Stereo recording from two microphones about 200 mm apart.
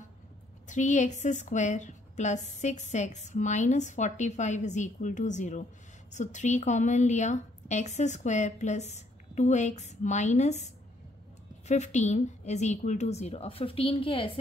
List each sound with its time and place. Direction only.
0.7 s a woman's voice: 35° left (ahead or behind)